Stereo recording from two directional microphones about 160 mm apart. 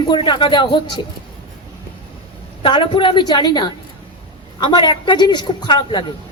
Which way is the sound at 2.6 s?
30° left (ahead or behind).